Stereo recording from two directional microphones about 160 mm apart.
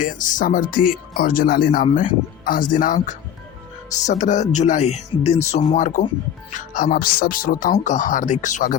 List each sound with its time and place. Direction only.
0.0 s speech: 55° left (ahead or behind)
6.5 s speech: 60° left (ahead or behind)